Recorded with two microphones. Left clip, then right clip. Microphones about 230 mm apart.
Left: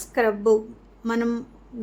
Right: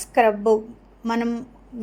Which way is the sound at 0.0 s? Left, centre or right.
Centre.